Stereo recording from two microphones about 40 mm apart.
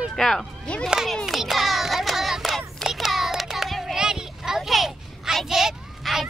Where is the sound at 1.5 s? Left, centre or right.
Centre.